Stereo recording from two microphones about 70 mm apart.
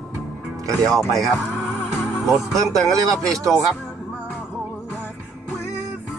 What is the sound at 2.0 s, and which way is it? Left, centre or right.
Music, centre.